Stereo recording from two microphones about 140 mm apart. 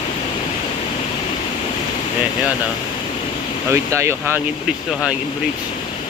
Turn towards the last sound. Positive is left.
turn(degrees=-15)  # may be behind; listen again after turning